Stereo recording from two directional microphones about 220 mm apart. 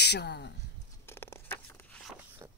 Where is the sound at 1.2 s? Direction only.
10° left (ahead or behind).